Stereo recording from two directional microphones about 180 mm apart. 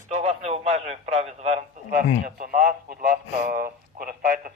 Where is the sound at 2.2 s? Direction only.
50° right (ahead or behind).